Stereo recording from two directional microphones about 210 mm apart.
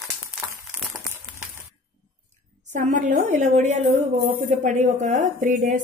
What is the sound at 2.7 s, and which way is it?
A woman's voice, 35° right (ahead or behind).